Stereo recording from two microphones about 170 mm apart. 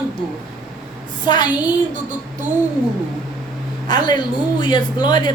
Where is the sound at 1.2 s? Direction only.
25° left (ahead or behind).